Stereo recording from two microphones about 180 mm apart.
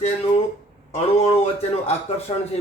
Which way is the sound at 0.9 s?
35° left (ahead or behind).